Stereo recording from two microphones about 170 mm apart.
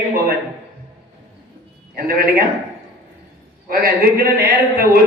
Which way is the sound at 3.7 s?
60° right (ahead or behind).